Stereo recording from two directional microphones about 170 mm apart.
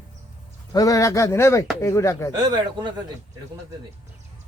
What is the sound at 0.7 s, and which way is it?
Speech, 20° left (ahead or behind).